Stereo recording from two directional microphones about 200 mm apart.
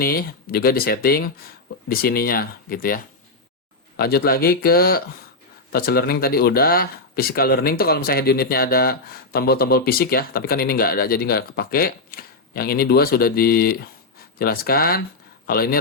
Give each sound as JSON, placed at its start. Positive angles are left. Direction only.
{"t": 0.0, "sound": "speech", "side_deg": 50}